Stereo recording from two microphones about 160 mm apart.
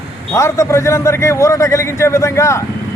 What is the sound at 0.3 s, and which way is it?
A man's voice, 20° left (ahead or behind).